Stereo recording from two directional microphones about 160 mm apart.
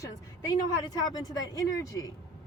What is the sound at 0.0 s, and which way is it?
Speech, 25° left (ahead or behind).